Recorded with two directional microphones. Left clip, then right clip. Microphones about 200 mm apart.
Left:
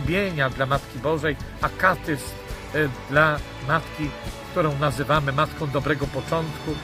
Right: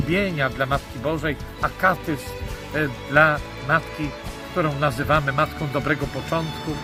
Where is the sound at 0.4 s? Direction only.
15° left (ahead or behind).